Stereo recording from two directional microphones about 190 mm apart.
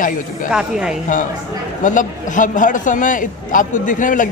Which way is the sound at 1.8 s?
40° left (ahead or behind).